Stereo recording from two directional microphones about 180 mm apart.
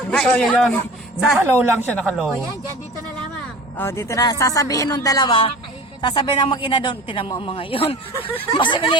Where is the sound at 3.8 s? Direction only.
15° left (ahead or behind).